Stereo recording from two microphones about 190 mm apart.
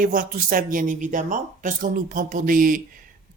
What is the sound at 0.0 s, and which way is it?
Speech, 45° right (ahead or behind).